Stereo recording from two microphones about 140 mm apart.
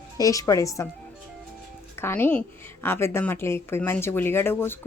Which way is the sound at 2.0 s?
15° left (ahead or behind).